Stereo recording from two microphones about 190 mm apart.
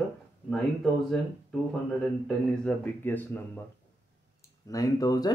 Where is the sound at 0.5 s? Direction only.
Centre (ahead or behind).